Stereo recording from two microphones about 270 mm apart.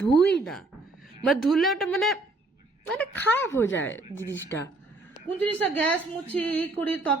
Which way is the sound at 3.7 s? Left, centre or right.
Left.